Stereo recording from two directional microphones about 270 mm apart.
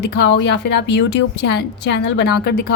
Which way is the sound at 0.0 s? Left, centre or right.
Left.